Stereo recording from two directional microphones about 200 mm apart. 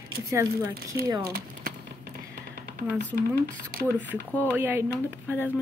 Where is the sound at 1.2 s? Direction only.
50° right (ahead or behind).